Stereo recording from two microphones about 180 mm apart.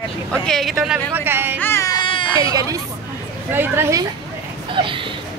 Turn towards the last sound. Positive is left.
turn(degrees=-30)  # may be behind; listen again after turning